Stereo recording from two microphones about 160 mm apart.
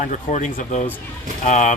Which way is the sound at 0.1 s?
50° left (ahead or behind).